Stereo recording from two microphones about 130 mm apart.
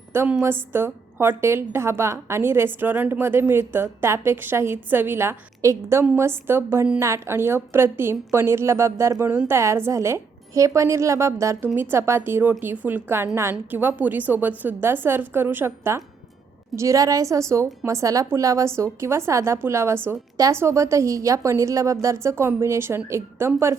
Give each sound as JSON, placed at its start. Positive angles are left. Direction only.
{"t": 0.1, "sound": "a woman's voice", "side_deg": -20}